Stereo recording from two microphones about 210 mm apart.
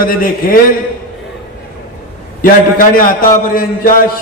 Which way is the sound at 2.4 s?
40° left (ahead or behind).